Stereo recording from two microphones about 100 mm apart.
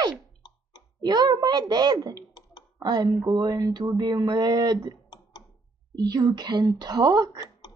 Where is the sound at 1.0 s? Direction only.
45° right (ahead or behind).